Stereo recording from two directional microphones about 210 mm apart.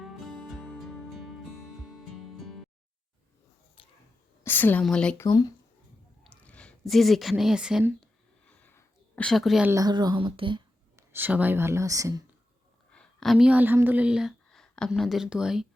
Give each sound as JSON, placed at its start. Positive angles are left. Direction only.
{"t": 0.0, "sound": "music", "side_deg": 0}
{"t": 3.8, "sound": "a sound", "side_deg": 25}
{"t": 4.4, "sound": "speech", "side_deg": 10}
{"t": 5.2, "sound": "speech", "side_deg": 15}
{"t": 6.4, "sound": "speech", "side_deg": 5}
{"t": 8.4, "sound": "a sound", "side_deg": 5}
{"t": 9.7, "sound": "speech", "side_deg": -20}
{"t": 11.1, "sound": "speech", "side_deg": -10}
{"t": 12.9, "sound": "a woman's voice", "side_deg": 5}